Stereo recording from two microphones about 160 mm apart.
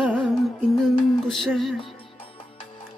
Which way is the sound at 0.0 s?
Centre (ahead or behind).